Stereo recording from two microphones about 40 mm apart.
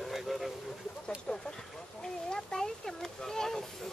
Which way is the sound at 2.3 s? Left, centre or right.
Centre.